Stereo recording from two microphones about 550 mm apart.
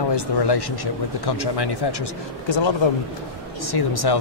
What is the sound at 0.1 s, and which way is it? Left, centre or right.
Speech, left.